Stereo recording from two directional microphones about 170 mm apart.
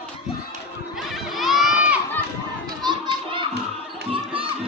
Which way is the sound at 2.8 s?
25° right (ahead or behind).